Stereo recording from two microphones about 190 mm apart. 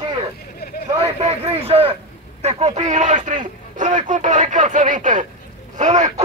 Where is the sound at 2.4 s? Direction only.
35° right (ahead or behind).